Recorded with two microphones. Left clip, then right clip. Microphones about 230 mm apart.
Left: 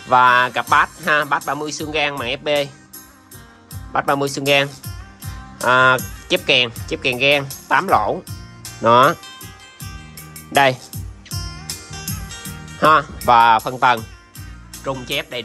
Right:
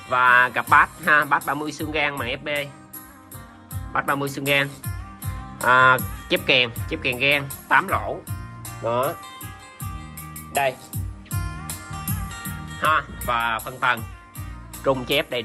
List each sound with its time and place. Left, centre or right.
0.1 s speech: centre
3.9 s speech: centre
12.8 s speech: left
14.8 s speech: centre